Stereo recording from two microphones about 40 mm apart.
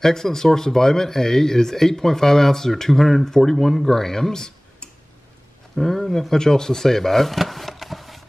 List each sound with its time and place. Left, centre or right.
0.0 s speech: centre
5.8 s speech: centre